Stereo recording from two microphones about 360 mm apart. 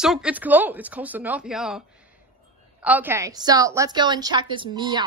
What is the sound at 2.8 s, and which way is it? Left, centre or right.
A woman's voice, centre.